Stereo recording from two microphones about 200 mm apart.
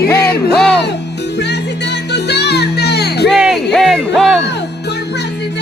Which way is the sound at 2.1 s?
55° left (ahead or behind).